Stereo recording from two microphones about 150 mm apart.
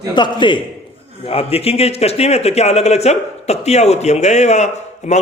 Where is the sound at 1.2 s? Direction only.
40° left (ahead or behind).